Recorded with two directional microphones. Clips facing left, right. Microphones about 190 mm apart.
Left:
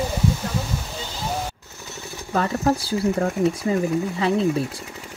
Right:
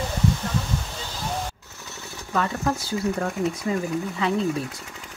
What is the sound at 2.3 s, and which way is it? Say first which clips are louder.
Speech: left 4 dB; 35° left (ahead or behind).